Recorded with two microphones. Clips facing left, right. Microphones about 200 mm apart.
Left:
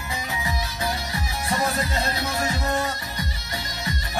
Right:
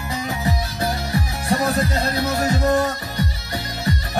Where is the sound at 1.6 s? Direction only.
45° right (ahead or behind).